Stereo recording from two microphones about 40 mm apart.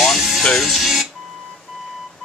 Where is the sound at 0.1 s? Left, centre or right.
Centre.